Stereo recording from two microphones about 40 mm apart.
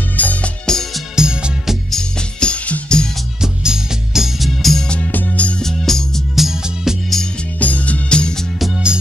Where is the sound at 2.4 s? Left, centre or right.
Left.